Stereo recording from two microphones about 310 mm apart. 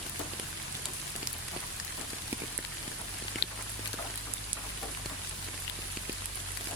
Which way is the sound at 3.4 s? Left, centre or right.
Left.